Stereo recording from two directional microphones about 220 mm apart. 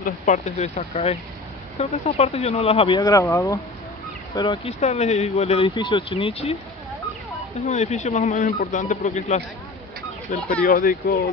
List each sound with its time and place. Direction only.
0.0 s speech: 35° left (ahead or behind); by 3.5 s 15° left (ahead or behind)
4.4 s speech: 25° left (ahead or behind)
7.5 s speech: 30° left (ahead or behind)
10.6 s speech: 40° left (ahead or behind)